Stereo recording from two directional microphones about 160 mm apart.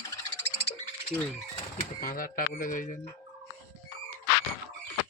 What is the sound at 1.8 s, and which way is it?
Speech, 65° left (ahead or behind).